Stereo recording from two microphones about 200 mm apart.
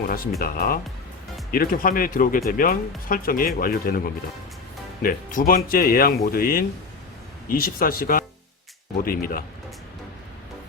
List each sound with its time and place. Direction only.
0.1 s speech: 45° left (ahead or behind)